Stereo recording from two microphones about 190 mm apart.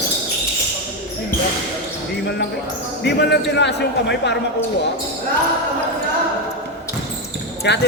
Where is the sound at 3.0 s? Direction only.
65° left (ahead or behind).